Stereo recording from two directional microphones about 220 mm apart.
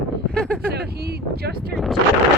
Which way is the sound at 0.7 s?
50° right (ahead or behind).